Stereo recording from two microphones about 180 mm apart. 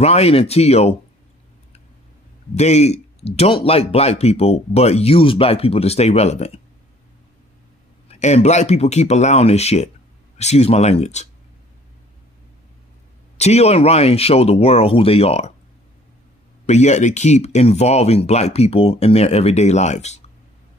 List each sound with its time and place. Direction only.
0.0 s speech: 35° left (ahead or behind)
2.5 s speech: 35° left (ahead or behind)
8.1 s speech: 40° left (ahead or behind)
13.4 s speech: 35° left (ahead or behind)
16.6 s speech: 40° left (ahead or behind)